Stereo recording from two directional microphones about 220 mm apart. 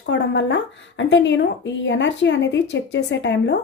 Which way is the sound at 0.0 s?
55° left (ahead or behind).